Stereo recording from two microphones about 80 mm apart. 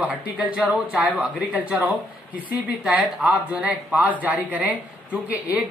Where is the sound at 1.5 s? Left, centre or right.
Centre.